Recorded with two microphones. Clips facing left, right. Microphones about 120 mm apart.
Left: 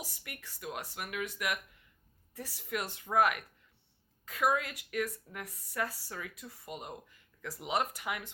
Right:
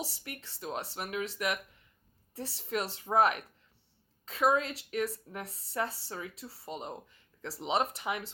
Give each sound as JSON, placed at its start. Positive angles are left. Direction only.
{"t": 0.0, "sound": "a woman's voice", "side_deg": -30}